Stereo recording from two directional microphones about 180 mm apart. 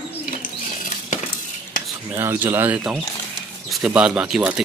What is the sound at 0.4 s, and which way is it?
Patter, 45° left (ahead or behind).